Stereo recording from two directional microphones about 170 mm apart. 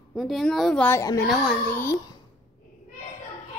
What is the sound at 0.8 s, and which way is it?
Speech, 15° left (ahead or behind).